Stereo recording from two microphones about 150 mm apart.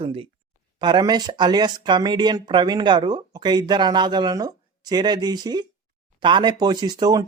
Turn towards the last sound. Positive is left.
turn(degrees=-25)  # may be behind; listen again after turning